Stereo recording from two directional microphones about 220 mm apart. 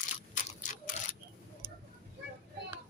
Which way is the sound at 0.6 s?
40° left (ahead or behind).